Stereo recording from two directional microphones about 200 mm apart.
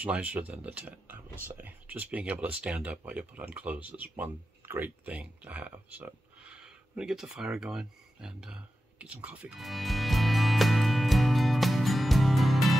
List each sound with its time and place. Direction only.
0.0 s speech: 5° right (ahead or behind)